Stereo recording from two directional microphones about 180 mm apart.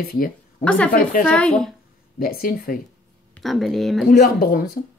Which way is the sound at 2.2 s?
55° left (ahead or behind).